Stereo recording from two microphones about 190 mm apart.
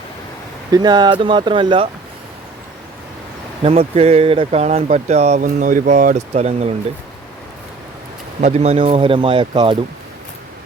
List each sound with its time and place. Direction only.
0.7 s speech: 20° right (ahead or behind)
3.6 s speech: 30° right (ahead or behind)
8.4 s speech: 35° right (ahead or behind)